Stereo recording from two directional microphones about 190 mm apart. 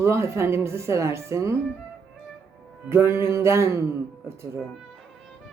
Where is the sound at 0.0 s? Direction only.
15° right (ahead or behind).